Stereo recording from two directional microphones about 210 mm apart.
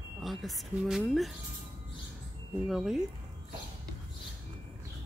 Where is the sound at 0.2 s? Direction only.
Centre (ahead or behind).